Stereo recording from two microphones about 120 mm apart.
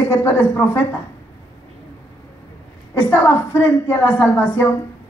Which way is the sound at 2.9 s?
20° left (ahead or behind).